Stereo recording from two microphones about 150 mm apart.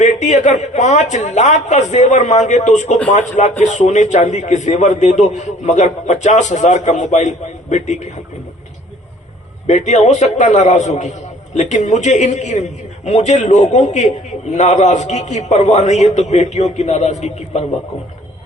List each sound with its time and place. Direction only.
0.0 s a man's voice: 50° left (ahead or behind)
9.6 s a man's voice: 50° left (ahead or behind)